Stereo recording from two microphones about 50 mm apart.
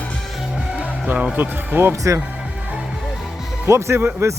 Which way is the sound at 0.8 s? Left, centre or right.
Right.